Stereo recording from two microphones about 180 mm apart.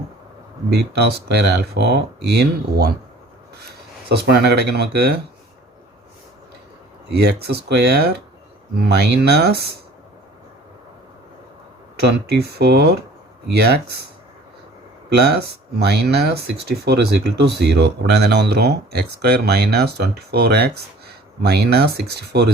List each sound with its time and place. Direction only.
0.7 s speech: 65° right (ahead or behind)
4.1 s speech: 65° right (ahead or behind)
7.1 s speech: 65° right (ahead or behind)
11.9 s speech: 65° right (ahead or behind)
15.1 s speech: 65° right (ahead or behind)